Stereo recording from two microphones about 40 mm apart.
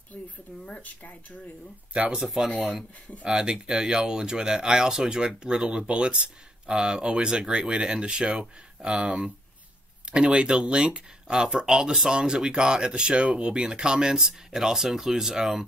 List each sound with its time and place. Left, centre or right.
0.1 s speech: left
2.1 s speech: centre